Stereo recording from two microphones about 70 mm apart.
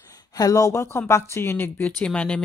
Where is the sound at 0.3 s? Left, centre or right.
Left.